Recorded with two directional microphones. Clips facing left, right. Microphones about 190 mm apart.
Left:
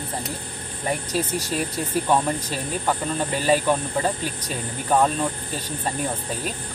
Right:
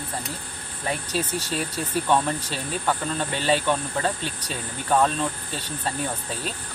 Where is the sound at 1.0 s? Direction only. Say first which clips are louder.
Left 2 dB; 15° left (ahead or behind).